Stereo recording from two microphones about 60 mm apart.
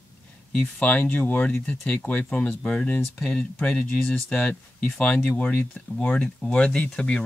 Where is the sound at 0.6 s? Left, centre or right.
Left.